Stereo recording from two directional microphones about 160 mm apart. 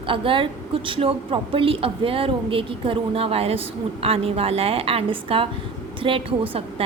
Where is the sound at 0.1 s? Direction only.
35° right (ahead or behind).